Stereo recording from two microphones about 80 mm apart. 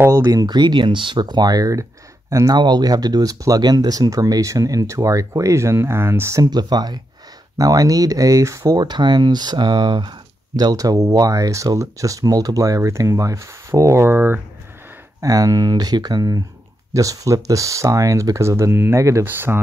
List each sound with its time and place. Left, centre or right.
0.1 s speech: right
6.4 s speech: right
7.5 s speech: right
8.8 s speech: right
15.2 s speech: right
19.2 s speech: right